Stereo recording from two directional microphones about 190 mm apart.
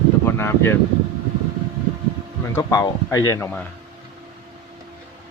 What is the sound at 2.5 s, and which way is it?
Speech, 15° left (ahead or behind).